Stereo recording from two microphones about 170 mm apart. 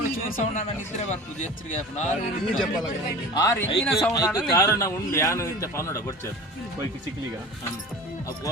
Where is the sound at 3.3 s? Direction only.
15° left (ahead or behind).